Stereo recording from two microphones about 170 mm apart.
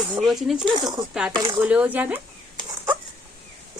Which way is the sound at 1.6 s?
10° right (ahead or behind).